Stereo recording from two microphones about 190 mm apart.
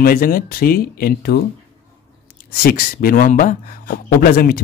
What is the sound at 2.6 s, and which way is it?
A man's voice, 50° left (ahead or behind).